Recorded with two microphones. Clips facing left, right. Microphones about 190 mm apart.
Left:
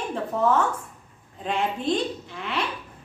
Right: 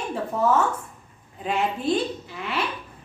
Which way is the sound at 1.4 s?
5° right (ahead or behind).